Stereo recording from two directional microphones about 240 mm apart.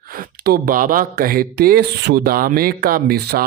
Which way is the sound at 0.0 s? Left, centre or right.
Right.